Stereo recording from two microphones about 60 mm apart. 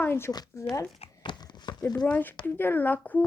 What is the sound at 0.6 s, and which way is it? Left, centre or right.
Speech, left.